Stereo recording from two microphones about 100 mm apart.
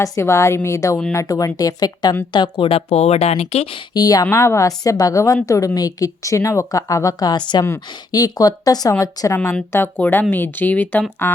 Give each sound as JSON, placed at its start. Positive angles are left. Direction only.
{"t": 0.0, "sound": "a woman's voice", "side_deg": 30}
{"t": 2.3, "sound": "speech", "side_deg": 55}
{"t": 3.9, "sound": "a woman's voice", "side_deg": 40}